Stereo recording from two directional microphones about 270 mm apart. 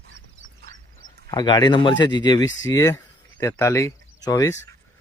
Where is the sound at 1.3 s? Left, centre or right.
Centre.